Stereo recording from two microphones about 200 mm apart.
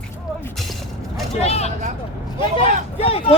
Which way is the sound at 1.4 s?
30° left (ahead or behind).